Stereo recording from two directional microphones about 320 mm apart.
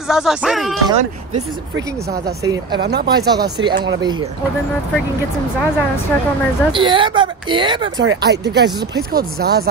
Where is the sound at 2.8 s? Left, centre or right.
Right.